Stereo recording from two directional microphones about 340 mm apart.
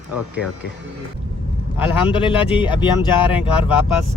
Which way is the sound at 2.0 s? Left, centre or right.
Centre.